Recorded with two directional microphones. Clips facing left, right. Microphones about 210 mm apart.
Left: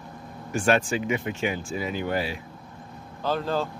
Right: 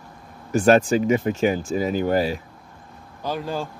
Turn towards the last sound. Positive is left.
turn(degrees=-10)  # may be behind; listen again after turning